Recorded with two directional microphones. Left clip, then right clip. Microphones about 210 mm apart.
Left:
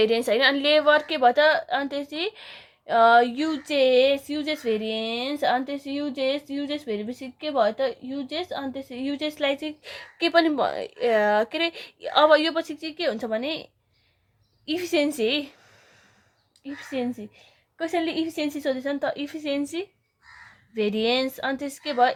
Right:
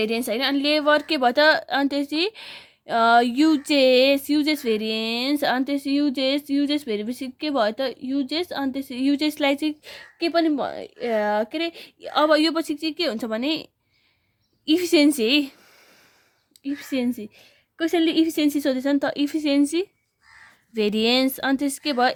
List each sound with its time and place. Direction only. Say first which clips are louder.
0.0 s a woman's voice: left 4 dB; 30° right (ahead or behind); by 9.9 s 45° right (ahead or behind)
9.9 s a woman's voice: left 4 dB; 30° right (ahead or behind)
16.6 s a woman's voice: right 4 dB; 50° right (ahead or behind)